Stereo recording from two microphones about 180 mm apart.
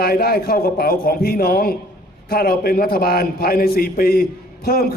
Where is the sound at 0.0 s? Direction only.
60° left (ahead or behind).